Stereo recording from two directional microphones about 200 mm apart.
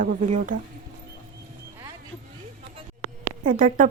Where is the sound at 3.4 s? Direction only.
40° right (ahead or behind).